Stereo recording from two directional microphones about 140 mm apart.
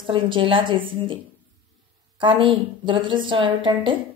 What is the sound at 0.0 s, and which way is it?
A woman's voice, 35° right (ahead or behind).